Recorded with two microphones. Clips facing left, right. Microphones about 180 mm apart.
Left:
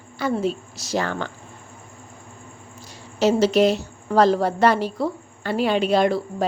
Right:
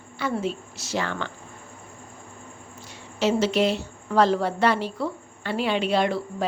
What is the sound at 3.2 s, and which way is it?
A woman's voice, 40° left (ahead or behind).